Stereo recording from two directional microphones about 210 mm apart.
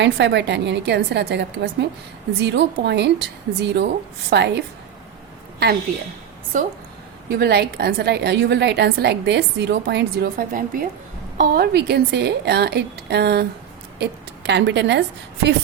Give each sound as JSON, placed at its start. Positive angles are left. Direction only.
{"t": 0.0, "sound": "a woman's voice", "side_deg": -55}
{"t": 6.5, "sound": "a woman's voice", "side_deg": -40}
{"t": 7.3, "sound": "a woman's voice", "side_deg": -50}